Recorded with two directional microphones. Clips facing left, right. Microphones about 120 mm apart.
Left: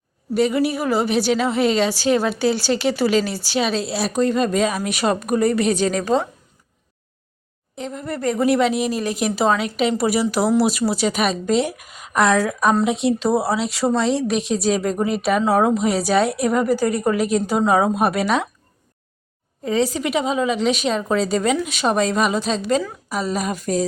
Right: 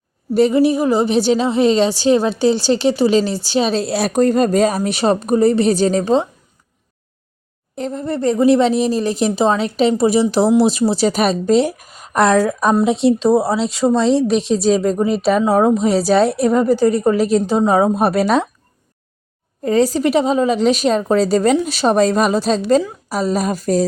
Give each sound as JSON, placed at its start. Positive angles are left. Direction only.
{"t": 0.3, "sound": "a woman's voice", "side_deg": -30}
{"t": 7.8, "sound": "a woman's voice", "side_deg": -35}
{"t": 19.6, "sound": "a woman's voice", "side_deg": -45}